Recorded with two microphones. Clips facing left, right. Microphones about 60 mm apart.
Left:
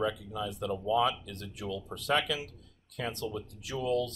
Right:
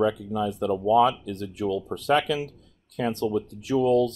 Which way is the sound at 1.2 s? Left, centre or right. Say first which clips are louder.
Right 11 dB; right.